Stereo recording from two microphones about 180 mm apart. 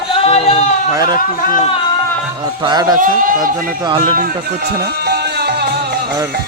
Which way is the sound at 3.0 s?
50° right (ahead or behind).